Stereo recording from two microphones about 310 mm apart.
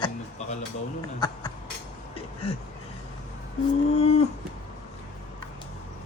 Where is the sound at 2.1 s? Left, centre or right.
Centre.